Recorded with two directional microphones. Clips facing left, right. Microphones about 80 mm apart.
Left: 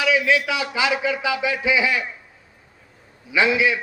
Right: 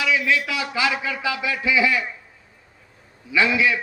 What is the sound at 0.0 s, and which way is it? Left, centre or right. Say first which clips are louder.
A man's voice: left 2 dB; left.